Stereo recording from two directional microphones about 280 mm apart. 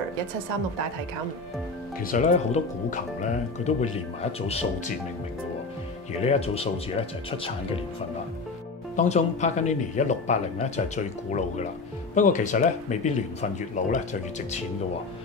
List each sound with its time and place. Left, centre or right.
2.0 s speech: left
6.2 s speech: left
8.9 s speech: left